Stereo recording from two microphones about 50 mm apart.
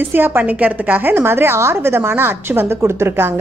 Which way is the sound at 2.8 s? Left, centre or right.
Right.